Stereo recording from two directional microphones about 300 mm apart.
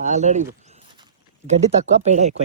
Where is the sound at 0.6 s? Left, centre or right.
Right.